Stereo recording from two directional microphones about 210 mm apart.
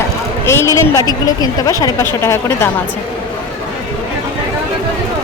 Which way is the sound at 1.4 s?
20° left (ahead or behind).